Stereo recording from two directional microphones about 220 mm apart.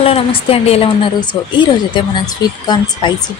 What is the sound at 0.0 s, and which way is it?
A woman's voice, 25° left (ahead or behind).